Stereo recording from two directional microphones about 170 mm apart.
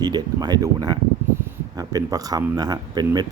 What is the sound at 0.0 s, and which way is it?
Speech, 25° right (ahead or behind).